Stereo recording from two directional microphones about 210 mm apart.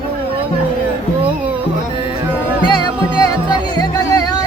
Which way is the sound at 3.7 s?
20° left (ahead or behind).